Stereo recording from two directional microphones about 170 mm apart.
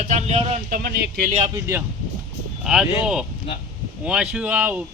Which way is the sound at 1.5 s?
15° right (ahead or behind).